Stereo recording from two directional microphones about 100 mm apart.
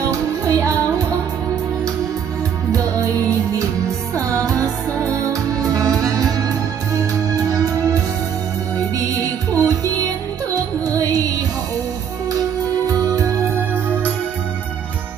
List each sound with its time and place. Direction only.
0.1 s music: 35° right (ahead or behind)
2.7 s music: 30° right (ahead or behind)
7.5 s music: 35° right (ahead or behind)
9.6 s music: 40° right (ahead or behind)
13.1 s music: 30° right (ahead or behind)